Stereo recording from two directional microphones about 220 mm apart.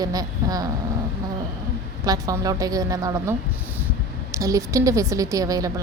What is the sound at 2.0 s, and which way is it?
A woman's voice, 15° right (ahead or behind).